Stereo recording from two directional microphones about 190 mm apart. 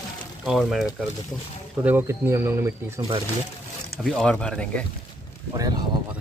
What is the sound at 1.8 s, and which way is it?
Speech, 10° right (ahead or behind).